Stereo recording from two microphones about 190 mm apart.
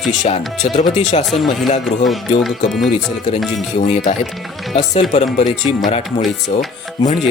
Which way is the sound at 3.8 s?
35° left (ahead or behind).